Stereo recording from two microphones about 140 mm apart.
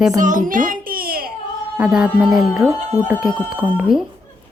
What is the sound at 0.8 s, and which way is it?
Baby cry, 90° right.